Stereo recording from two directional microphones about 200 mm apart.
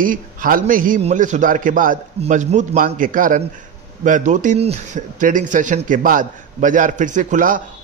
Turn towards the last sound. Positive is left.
turn(degrees=-40)  # may be behind; listen again after turning